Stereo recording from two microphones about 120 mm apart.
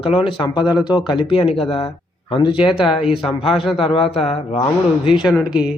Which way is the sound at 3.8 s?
50° left (ahead or behind).